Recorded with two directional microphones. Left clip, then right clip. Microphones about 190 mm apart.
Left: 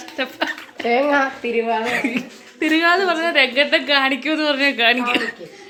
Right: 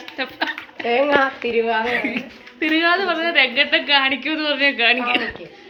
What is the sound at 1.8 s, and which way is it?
A woman's voice, 35° left (ahead or behind).